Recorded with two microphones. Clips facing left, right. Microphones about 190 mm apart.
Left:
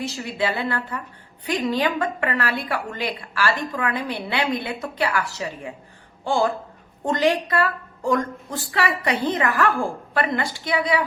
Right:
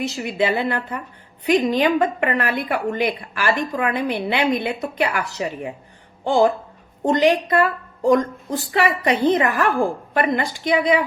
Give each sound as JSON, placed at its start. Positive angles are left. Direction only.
{"t": 0.0, "sound": "a woman's voice", "side_deg": -20}